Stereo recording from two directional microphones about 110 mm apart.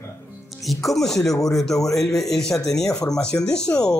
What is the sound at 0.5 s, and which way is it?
Speech, centre (ahead or behind).